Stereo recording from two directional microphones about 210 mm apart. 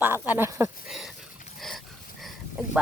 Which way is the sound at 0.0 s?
10° right (ahead or behind).